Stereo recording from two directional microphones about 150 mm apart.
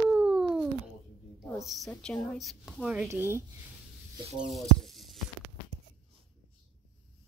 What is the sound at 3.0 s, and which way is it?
Speech, 15° right (ahead or behind).